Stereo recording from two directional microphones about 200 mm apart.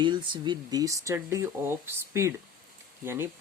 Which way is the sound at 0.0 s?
25° right (ahead or behind).